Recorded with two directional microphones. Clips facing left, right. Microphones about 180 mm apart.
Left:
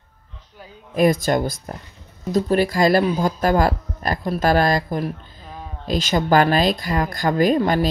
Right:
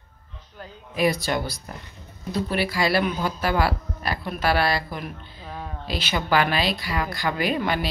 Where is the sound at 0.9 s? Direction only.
45° left (ahead or behind).